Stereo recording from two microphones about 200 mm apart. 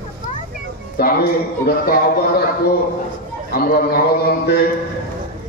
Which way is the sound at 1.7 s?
50° left (ahead or behind).